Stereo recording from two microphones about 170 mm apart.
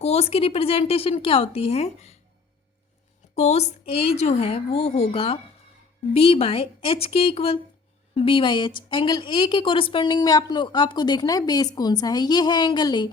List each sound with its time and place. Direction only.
0.0 s speech: 40° left (ahead or behind)
3.3 s speech: 40° left (ahead or behind); by 13.1 s 25° left (ahead or behind)